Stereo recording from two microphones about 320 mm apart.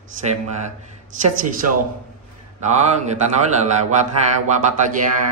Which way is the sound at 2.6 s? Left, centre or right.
Right.